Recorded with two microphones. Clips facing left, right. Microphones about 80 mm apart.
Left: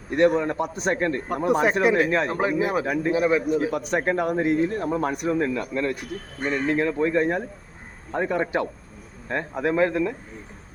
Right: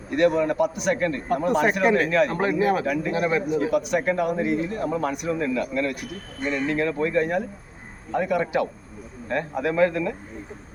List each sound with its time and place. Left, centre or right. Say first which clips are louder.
0.2 s speech: even; left
1.8 s a man's voice: even; centre
2.0 s speech: right 2 dB; left
2.4 s a man's voice: right 1 dB; centre
2.8 s speech: even; left
3.1 s a man's voice: left 4 dB; centre
3.6 s speech: right 2 dB; left